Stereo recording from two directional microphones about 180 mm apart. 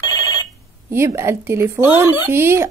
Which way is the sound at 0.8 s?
15° right (ahead or behind).